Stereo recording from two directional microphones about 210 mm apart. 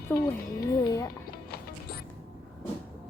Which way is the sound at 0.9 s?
15° left (ahead or behind).